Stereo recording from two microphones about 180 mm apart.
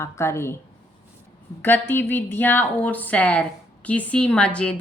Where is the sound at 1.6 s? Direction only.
10° left (ahead or behind).